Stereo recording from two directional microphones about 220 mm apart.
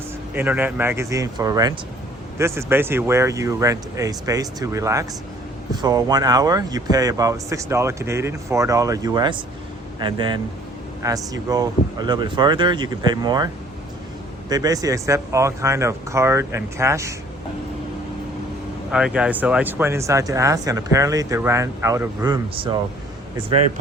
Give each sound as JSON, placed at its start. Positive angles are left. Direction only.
{"t": 0.3, "sound": "speech", "side_deg": -10}
{"t": 14.5, "sound": "speech", "side_deg": -15}
{"t": 18.9, "sound": "speech", "side_deg": -5}